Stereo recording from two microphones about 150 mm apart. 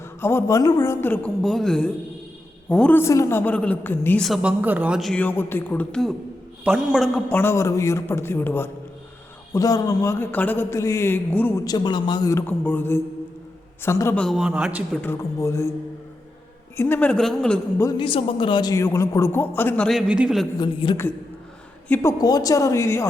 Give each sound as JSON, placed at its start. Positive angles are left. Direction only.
{"t": 0.2, "sound": "a man's voice", "side_deg": 15}
{"t": 4.2, "sound": "a man's voice", "side_deg": 0}
{"t": 5.2, "sound": "a man's voice", "side_deg": 15}
{"t": 7.3, "sound": "speech", "side_deg": 15}
{"t": 11.6, "sound": "a man's voice", "side_deg": 25}
{"t": 14.2, "sound": "a man's voice", "side_deg": 0}
{"t": 15.0, "sound": "a man's voice", "side_deg": 20}
{"t": 16.7, "sound": "speech", "side_deg": 15}
{"t": 17.9, "sound": "a man's voice", "side_deg": 35}
{"t": 19.9, "sound": "a man's voice", "side_deg": -5}
{"t": 20.6, "sound": "a woman's voice", "side_deg": 30}
{"t": 21.8, "sound": "a man's voice", "side_deg": 15}
{"t": 22.2, "sound": "a man's voice", "side_deg": 25}